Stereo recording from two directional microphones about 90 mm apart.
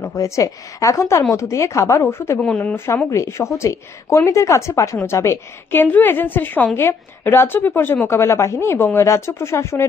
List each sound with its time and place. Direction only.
0.1 s a woman's voice: 40° left (ahead or behind)
2.4 s speech: 10° left (ahead or behind)
3.1 s a woman's voice: 30° left (ahead or behind)